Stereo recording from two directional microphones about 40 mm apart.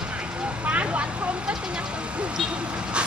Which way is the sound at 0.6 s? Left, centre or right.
Right.